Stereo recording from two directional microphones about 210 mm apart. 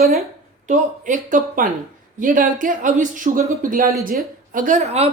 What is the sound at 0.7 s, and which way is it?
Speech, 35° right (ahead or behind).